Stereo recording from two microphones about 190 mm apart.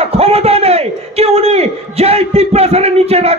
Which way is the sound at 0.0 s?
35° right (ahead or behind).